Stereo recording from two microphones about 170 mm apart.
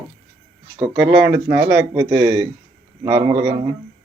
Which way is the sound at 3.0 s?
20° right (ahead or behind).